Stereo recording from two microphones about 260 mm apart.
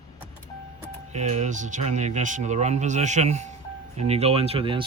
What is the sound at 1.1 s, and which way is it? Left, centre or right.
Speech, right.